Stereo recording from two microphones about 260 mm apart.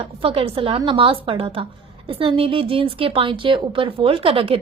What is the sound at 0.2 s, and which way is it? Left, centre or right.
Speech, right.